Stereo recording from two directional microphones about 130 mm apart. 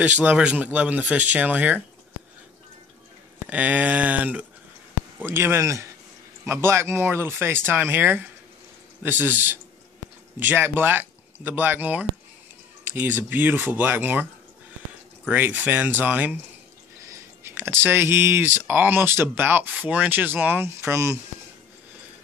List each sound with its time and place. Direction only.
0.0 s speech: 10° right (ahead or behind)
3.4 s speech: 10° right (ahead or behind)
15.2 s speech: 15° right (ahead or behind)